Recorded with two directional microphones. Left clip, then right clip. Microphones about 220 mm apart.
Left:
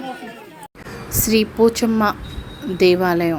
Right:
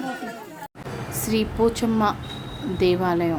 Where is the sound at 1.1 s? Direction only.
15° left (ahead or behind).